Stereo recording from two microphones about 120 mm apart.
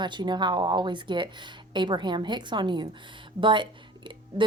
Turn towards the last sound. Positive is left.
turn(degrees=-40)  # may be behind; listen again after turning